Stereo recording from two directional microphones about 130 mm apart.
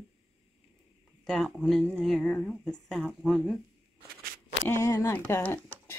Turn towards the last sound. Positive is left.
turn(degrees=15)  # may be behind; listen again after turning